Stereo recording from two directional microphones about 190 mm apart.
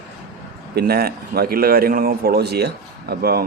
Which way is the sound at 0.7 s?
55° right (ahead or behind).